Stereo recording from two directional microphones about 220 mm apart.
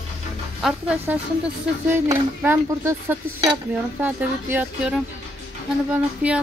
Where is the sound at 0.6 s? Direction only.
5° right (ahead or behind).